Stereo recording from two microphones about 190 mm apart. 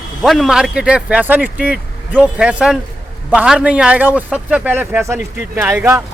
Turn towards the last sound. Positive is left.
turn(degrees=-10)  # may be behind; listen again after turning